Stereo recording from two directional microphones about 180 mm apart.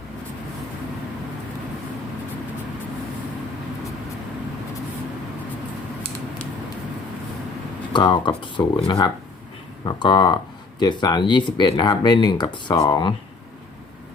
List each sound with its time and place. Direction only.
7.9 s speech: 25° left (ahead or behind)